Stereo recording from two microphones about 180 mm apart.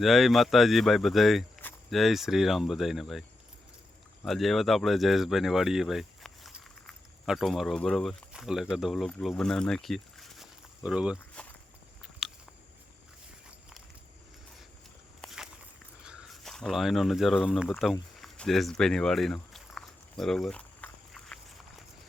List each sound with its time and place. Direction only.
0.0 s speech: centre (ahead or behind)
4.3 s speech: centre (ahead or behind)
15.2 s walk: centre (ahead or behind)
16.0 s speech: centre (ahead or behind)
18.2 s a sound: centre (ahead or behind)